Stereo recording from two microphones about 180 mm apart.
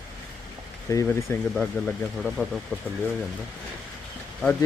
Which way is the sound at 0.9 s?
15° left (ahead or behind).